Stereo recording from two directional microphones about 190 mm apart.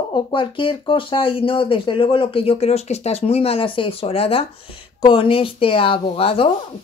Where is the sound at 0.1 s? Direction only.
25° left (ahead or behind).